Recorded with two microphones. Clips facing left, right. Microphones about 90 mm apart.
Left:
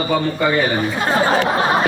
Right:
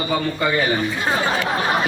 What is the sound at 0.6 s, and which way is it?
Speech, 40° left (ahead or behind).